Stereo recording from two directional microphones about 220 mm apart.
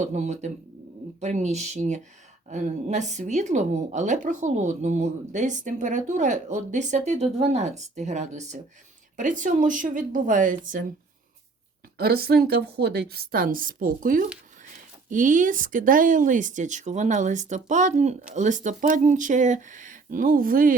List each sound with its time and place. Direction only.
0.0 s a woman's voice: 35° right (ahead or behind)
11.9 s a woman's voice: 45° right (ahead or behind)